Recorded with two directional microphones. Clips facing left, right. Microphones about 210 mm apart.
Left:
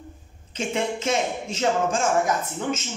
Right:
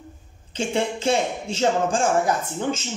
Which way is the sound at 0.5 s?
30° right (ahead or behind).